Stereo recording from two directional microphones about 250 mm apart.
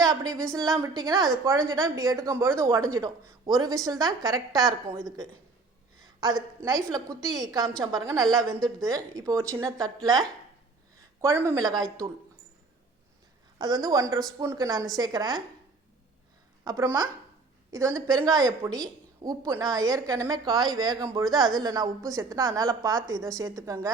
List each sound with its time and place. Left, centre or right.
0.0 s a woman's voice: centre
6.3 s a woman's voice: centre
13.6 s a woman's voice: centre
16.6 s a woman's voice: centre